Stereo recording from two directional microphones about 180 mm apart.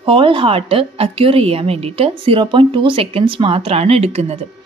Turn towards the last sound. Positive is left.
turn(degrees=-35)  # may be behind; listen again after turning